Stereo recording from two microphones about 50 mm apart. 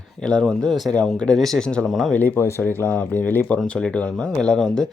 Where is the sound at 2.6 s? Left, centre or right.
Left.